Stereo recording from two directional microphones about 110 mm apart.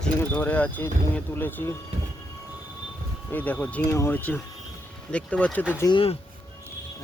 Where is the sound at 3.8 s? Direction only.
25° left (ahead or behind).